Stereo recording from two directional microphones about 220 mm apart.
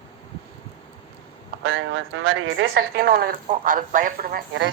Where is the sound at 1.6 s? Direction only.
60° right (ahead or behind).